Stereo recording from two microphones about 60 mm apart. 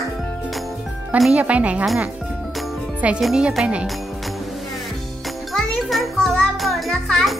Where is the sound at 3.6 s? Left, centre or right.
Centre.